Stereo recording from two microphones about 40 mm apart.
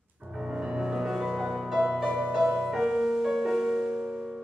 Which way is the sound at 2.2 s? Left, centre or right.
Centre.